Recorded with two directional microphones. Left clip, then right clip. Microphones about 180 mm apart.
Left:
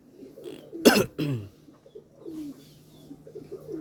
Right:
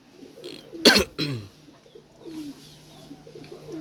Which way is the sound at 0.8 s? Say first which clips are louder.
Right 2 dB; 35° left (ahead or behind).